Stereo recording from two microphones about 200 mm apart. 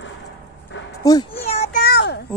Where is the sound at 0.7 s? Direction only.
65° left (ahead or behind).